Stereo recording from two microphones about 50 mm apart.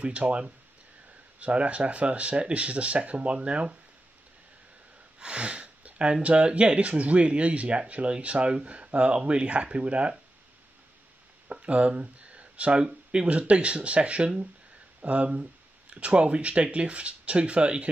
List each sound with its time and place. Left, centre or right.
0.0 s speech: right
5.2 s speech: right
11.6 s a sound: right
12.8 s speech: centre
13.3 s speech: right